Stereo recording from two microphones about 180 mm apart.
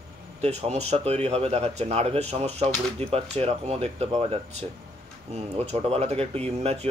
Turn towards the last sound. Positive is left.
turn(degrees=-35)  # may be behind; listen again after turning